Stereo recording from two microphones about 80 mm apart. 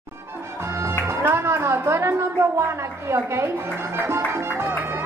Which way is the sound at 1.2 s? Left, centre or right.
Right.